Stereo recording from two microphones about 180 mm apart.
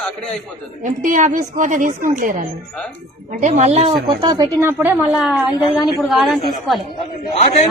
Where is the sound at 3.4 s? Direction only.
40° right (ahead or behind); by 4.9 s 15° right (ahead or behind).